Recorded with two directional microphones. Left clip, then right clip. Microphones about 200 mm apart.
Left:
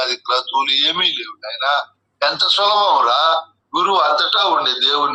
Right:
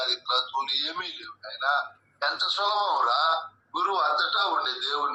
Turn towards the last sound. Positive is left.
turn(degrees=30)  # may be behind; listen again after turning